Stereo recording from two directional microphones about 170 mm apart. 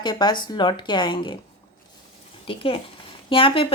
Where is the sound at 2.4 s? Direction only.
30° left (ahead or behind).